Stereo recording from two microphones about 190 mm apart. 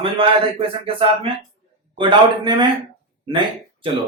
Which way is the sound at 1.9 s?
25° right (ahead or behind).